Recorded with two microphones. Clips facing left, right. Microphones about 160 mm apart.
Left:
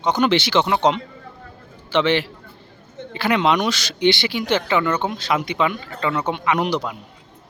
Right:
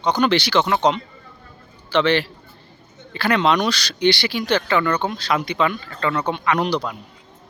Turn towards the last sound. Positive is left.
turn(degrees=20)  # may be behind; listen again after turning